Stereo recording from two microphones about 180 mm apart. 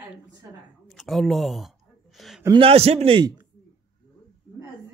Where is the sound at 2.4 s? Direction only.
30° right (ahead or behind).